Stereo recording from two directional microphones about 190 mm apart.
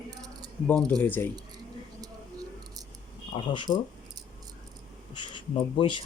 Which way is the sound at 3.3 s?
25° left (ahead or behind).